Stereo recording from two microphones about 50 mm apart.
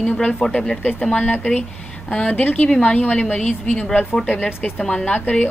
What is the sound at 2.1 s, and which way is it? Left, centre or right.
Speech, left.